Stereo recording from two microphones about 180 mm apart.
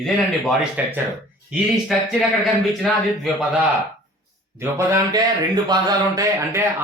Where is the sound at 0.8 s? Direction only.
10° right (ahead or behind).